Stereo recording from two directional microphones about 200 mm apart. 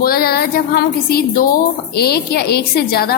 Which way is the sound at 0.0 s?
50° left (ahead or behind).